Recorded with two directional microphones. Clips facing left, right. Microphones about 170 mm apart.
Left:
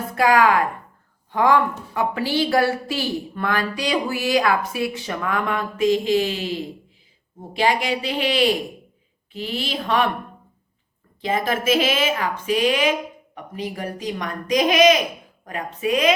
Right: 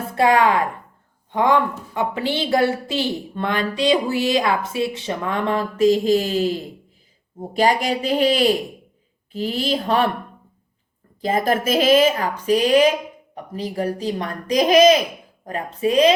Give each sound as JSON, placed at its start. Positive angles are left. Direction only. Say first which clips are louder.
{"t": 0.2, "sound": "a woman's voice", "louder": "right 1 dB", "side_deg": -25}
{"t": 11.2, "sound": "a woman's voice", "louder": "right 3 dB", "side_deg": -40}